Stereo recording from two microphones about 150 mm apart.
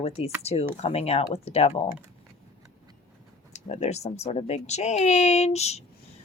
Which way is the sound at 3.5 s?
45° left (ahead or behind).